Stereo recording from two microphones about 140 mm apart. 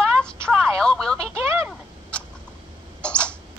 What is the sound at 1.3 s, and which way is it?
Speech, 20° right (ahead or behind).